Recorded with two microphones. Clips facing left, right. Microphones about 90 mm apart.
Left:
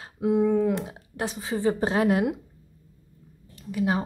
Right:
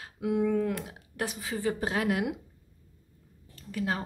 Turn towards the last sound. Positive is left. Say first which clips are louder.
# left 6 dB
turn(degrees=15)  # may be behind; listen again after turning